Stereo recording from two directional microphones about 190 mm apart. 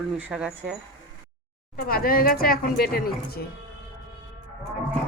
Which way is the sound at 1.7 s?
50° left (ahead or behind).